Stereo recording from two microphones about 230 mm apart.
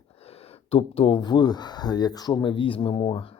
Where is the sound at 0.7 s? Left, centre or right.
Left.